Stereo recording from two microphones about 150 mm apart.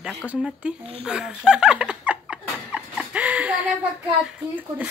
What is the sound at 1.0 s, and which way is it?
Laughter, 5° right (ahead or behind).